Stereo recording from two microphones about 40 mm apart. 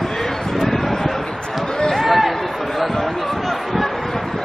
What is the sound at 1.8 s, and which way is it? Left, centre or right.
Run, centre.